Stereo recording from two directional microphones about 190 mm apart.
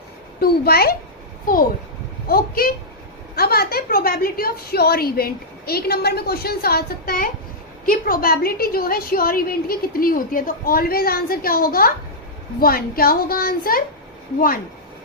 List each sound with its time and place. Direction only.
0.3 s a woman's voice: 55° left (ahead or behind)
2.2 s a woman's voice: 50° left (ahead or behind)